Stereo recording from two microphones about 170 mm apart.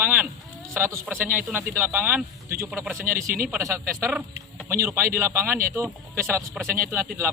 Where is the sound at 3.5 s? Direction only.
10° right (ahead or behind).